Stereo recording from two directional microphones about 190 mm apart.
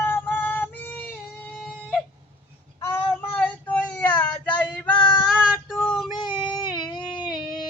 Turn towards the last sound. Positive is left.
turn(degrees=0)  # may be behind; listen again after turning